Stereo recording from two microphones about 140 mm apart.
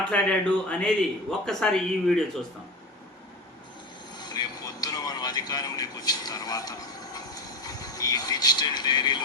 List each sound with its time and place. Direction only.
0.1 s speech: 10° left (ahead or behind)
4.2 s vehicle: 30° left (ahead or behind)